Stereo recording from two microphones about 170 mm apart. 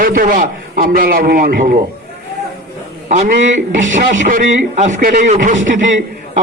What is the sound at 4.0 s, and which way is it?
A man's voice, 60° right (ahead or behind).